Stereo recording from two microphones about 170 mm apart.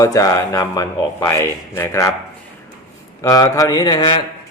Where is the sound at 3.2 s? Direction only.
20° left (ahead or behind).